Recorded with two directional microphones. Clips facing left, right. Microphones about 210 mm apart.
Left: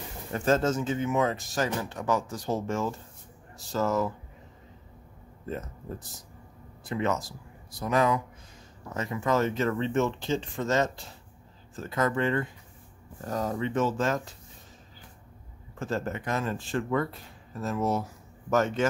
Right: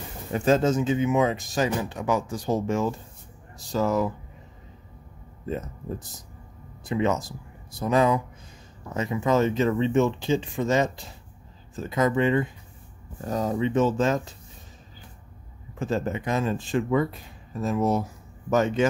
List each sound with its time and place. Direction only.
0.3 s speech: 15° right (ahead or behind)
6.8 s speech: 20° right (ahead or behind)
15.8 s speech: 15° right (ahead or behind)